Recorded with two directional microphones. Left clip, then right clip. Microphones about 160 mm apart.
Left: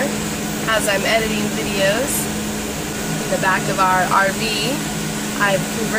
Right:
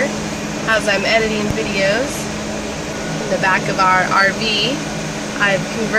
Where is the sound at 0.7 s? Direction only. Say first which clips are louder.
Right 2 dB; 20° right (ahead or behind).